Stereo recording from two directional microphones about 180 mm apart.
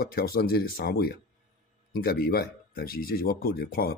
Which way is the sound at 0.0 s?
55° left (ahead or behind).